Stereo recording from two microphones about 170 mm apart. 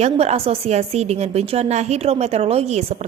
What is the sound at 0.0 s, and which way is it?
A woman's voice, 40° right (ahead or behind).